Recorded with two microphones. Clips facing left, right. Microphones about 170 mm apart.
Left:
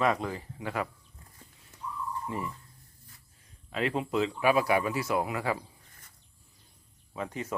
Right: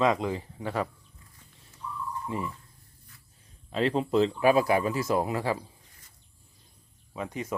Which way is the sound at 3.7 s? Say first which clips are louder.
Right 4 dB; 30° right (ahead or behind).